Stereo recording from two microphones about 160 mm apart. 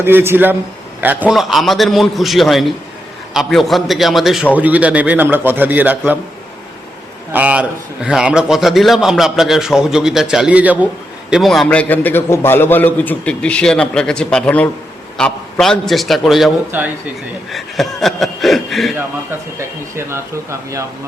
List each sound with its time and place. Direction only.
0.0 s a man's voice: 15° right (ahead or behind)
7.3 s a man's voice: 10° right (ahead or behind)
16.7 s a man's voice: 10° right (ahead or behind)
17.5 s speech: centre (ahead or behind)
19.5 s a man's voice: 15° right (ahead or behind)